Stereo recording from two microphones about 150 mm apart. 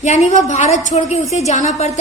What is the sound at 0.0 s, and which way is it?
A woman's voice, 50° left (ahead or behind).